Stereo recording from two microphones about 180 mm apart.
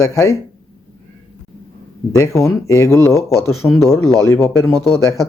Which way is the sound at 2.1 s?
15° left (ahead or behind).